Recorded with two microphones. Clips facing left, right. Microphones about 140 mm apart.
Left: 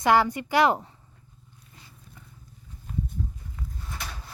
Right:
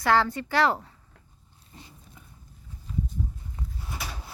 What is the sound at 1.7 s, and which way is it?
Roaring cats, 30° right (ahead or behind).